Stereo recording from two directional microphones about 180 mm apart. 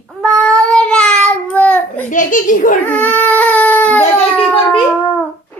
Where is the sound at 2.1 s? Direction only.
45° left (ahead or behind).